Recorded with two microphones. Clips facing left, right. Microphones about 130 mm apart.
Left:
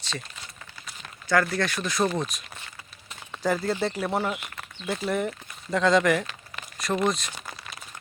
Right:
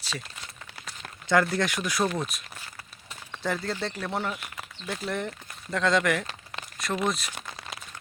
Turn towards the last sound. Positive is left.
turn(degrees=-5)  # may be behind; listen again after turning